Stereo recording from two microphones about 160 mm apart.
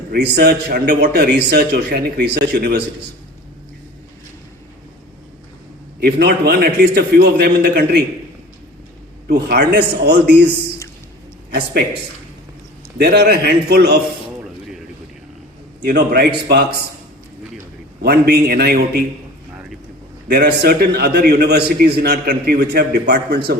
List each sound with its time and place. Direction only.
0.1 s a man's voice: 90° right
6.0 s a man's voice: 80° right
9.2 s a man's voice: 80° right
13.0 s a man's voice: 80° right
15.8 s a man's voice: 80° right
18.0 s a man's voice: 80° right
20.2 s a man's voice: 85° right